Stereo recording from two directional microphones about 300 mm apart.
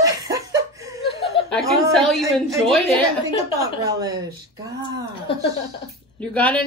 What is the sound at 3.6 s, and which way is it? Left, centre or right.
Speech, centre.